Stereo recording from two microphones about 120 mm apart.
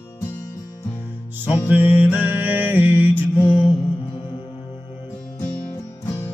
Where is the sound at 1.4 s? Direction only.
15° right (ahead or behind).